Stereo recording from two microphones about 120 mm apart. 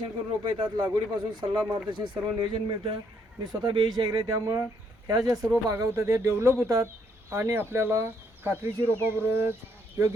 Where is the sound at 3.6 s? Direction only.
40° right (ahead or behind).